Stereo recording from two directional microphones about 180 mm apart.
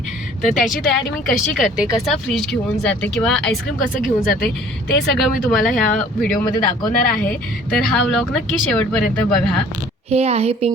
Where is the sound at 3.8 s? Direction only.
50° left (ahead or behind).